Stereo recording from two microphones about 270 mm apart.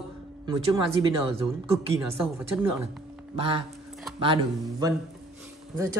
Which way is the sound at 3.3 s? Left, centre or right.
Centre.